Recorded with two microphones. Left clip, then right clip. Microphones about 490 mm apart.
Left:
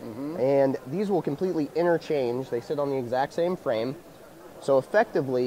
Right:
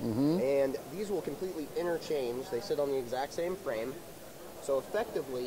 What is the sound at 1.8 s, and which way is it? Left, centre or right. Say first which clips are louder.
Speech: left 8 dB; left.